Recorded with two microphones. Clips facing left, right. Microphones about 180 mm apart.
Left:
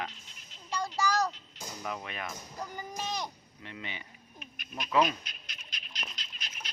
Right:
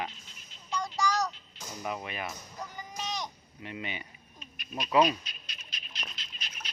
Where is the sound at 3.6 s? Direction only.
15° right (ahead or behind).